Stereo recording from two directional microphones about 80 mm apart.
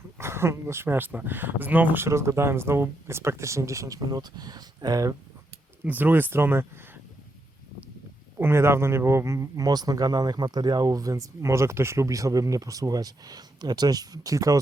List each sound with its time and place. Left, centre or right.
0.2 s speech: right
2.0 s speech: right
5.8 s speech: right
8.4 s speech: right